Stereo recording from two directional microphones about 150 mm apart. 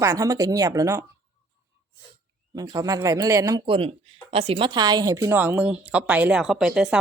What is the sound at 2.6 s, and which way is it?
Speech, 25° right (ahead or behind).